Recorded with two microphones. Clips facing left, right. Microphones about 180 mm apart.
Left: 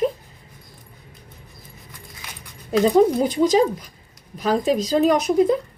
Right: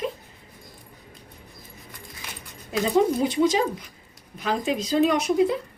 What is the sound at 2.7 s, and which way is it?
Speech, 40° left (ahead or behind).